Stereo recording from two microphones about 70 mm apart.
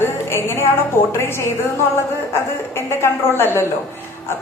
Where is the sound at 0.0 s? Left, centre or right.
Left.